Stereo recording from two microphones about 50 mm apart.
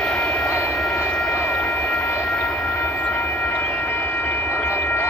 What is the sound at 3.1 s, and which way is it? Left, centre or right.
Train, left.